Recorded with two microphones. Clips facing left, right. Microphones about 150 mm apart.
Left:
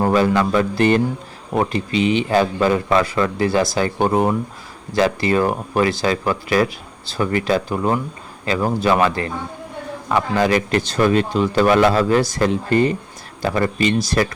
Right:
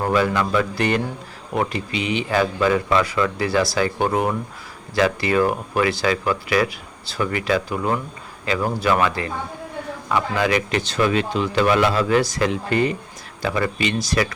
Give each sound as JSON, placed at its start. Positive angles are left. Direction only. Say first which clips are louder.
{"t": 0.1, "sound": "speech", "louder": "left 3 dB", "side_deg": 30}
{"t": 4.0, "sound": "speech", "louder": "left 3 dB", "side_deg": 35}